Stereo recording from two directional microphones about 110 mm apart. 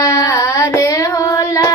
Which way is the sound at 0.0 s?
30° left (ahead or behind).